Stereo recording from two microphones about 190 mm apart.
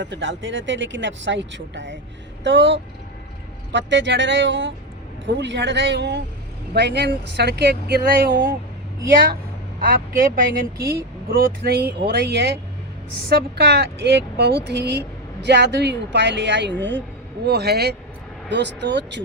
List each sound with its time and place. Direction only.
0.0 s speech: 75° right (ahead or behind); by 8.1 s 60° right (ahead or behind)
10.2 s speech: 50° right (ahead or behind); by 17.0 s 70° right (ahead or behind)
17.4 s speech: 60° right (ahead or behind)